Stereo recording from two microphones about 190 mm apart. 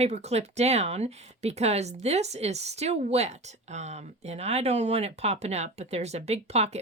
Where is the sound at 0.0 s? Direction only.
35° right (ahead or behind).